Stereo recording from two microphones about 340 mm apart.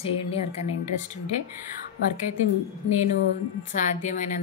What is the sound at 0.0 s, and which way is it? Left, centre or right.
Speech, centre.